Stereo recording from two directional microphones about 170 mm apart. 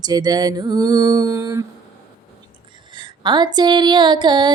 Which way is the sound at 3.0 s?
25° right (ahead or behind).